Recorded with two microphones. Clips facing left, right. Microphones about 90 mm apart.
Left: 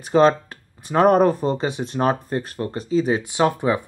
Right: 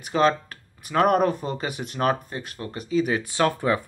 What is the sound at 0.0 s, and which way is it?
Speech, 35° left (ahead or behind).